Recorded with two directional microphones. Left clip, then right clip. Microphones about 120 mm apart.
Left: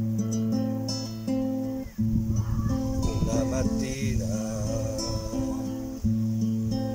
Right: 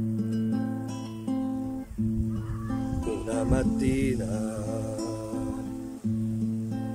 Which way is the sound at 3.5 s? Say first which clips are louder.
Right 2 dB; 55° right (ahead or behind).